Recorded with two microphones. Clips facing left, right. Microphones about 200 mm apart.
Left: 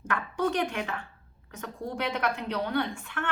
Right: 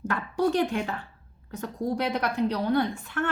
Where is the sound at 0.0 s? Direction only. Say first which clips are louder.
Right 3 dB; 35° right (ahead or behind).